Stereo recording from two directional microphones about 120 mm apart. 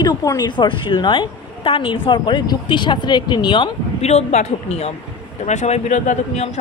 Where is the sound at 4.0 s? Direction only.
65° left (ahead or behind).